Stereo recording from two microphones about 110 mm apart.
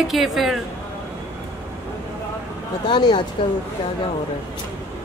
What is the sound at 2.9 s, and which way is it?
Speech, 45° left (ahead or behind).